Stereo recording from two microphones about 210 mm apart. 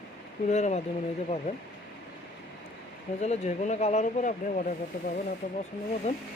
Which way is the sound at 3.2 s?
30° left (ahead or behind).